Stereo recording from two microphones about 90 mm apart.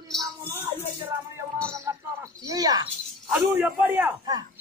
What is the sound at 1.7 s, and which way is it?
Music, 35° right (ahead or behind).